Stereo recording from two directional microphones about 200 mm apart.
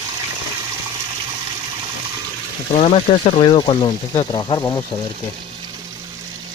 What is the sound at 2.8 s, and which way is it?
Speech, 30° left (ahead or behind).